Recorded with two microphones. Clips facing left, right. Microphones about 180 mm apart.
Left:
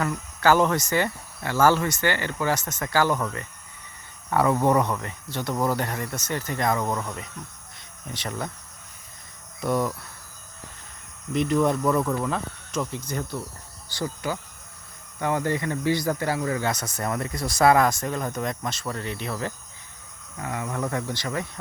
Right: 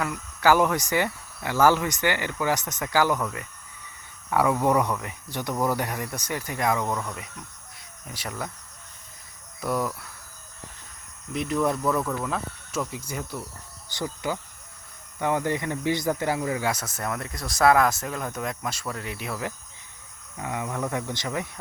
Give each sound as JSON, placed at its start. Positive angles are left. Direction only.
{"t": 0.3, "sound": "speech", "side_deg": -10}
{"t": 6.8, "sound": "speech", "side_deg": 5}
{"t": 8.1, "sound": "speech", "side_deg": -5}
{"t": 9.6, "sound": "speech", "side_deg": -5}
{"t": 11.3, "sound": "speech", "side_deg": 0}